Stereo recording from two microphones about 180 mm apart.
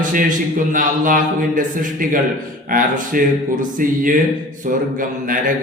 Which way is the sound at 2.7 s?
50° right (ahead or behind).